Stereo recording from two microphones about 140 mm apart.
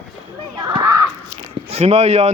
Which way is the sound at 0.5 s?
30° right (ahead or behind).